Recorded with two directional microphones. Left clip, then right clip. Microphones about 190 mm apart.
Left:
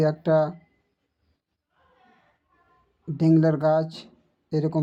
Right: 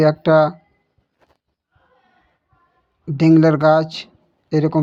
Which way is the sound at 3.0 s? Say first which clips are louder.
Right 8 dB; 15° right (ahead or behind).